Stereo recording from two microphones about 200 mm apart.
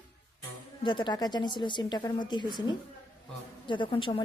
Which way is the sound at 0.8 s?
25° left (ahead or behind).